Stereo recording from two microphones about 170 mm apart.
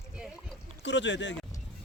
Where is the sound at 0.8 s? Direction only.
90° left.